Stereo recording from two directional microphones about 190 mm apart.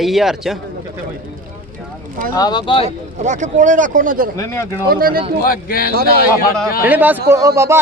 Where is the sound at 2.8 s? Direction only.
40° right (ahead or behind).